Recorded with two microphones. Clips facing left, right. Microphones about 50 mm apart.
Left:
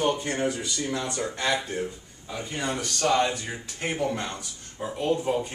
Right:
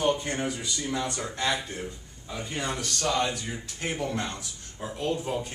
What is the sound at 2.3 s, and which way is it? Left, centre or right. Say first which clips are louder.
Speech: left 2 dB; centre.